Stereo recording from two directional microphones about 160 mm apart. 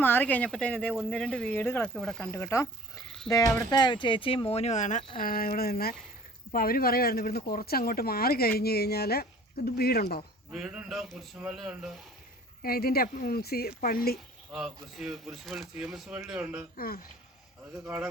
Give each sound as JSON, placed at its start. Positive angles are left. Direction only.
{"t": 0.0, "sound": "speech", "side_deg": 10}
{"t": 2.3, "sound": "speech", "side_deg": 15}
{"t": 3.3, "sound": "speech", "side_deg": 5}
{"t": 3.7, "sound": "speech", "side_deg": 25}
{"t": 5.1, "sound": "speech", "side_deg": 60}
{"t": 10.5, "sound": "speech", "side_deg": -5}
{"t": 12.6, "sound": "speech", "side_deg": 70}
{"t": 14.9, "sound": "speech", "side_deg": 0}
{"t": 16.7, "sound": "speech", "side_deg": 65}
{"t": 17.8, "sound": "a man's voice", "side_deg": -5}